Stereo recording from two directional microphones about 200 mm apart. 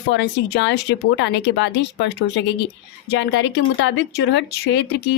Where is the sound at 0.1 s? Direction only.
60° left (ahead or behind).